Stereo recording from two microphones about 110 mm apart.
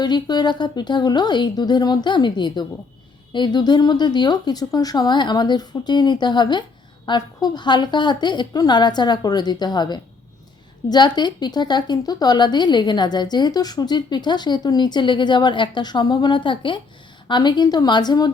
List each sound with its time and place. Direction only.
0.0 s speech: 40° left (ahead or behind)